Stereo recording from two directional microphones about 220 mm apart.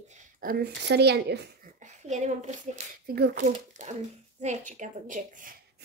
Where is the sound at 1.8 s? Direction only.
30° right (ahead or behind).